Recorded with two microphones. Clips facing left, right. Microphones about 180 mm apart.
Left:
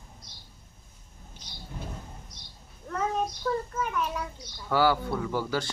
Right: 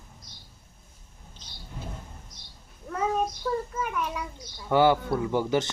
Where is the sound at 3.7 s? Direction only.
10° right (ahead or behind).